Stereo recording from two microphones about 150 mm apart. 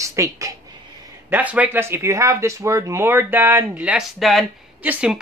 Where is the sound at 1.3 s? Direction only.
10° right (ahead or behind).